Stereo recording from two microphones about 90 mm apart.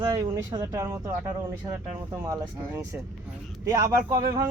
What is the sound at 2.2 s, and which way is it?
Speech, 40° right (ahead or behind).